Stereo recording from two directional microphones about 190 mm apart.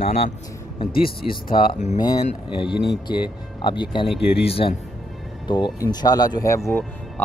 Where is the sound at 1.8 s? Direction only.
35° left (ahead or behind).